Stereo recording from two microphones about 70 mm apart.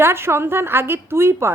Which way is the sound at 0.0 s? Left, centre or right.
Right.